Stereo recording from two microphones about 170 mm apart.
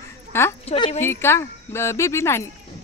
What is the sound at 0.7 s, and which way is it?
Speech, 40° left (ahead or behind).